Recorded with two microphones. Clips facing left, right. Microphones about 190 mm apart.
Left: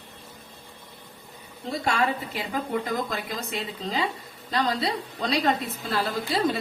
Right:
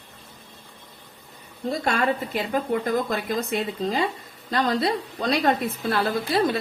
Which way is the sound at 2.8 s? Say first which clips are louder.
Right 5 dB; 50° right (ahead or behind).